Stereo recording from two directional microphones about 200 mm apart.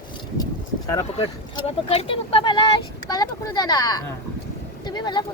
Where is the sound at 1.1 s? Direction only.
30° left (ahead or behind).